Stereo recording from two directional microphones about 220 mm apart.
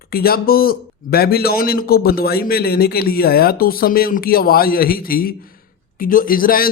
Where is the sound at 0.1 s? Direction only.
45° left (ahead or behind).